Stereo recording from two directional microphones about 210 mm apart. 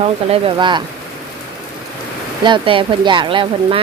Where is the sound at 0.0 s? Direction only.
25° right (ahead or behind).